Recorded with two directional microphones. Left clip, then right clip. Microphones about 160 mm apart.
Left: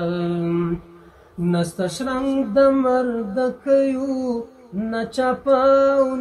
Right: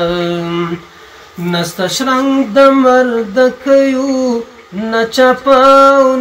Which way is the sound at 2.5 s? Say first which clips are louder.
Right 9 dB; 25° left (ahead or behind).